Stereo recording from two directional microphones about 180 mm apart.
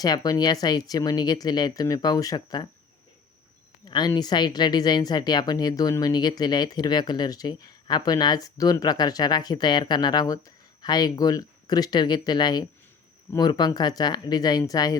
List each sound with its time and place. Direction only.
0.0 s speech: 20° left (ahead or behind)
3.8 s speech: 25° left (ahead or behind)